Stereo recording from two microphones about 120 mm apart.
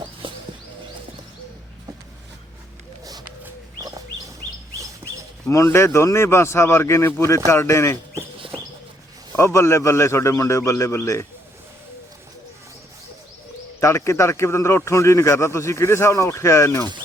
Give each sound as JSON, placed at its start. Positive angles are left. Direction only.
{"t": 3.0, "sound": "a sound", "side_deg": -30}
{"t": 3.8, "sound": "chicken", "side_deg": -30}
{"t": 5.5, "sound": "a man's voice", "side_deg": 25}
{"t": 9.3, "sound": "a man's voice", "side_deg": 25}
{"t": 13.7, "sound": "a man's voice", "side_deg": 25}